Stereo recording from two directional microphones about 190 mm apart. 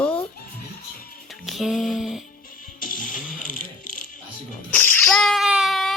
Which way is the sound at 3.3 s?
45° left (ahead or behind).